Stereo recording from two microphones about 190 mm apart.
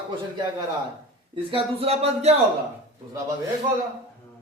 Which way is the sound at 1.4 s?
30° right (ahead or behind).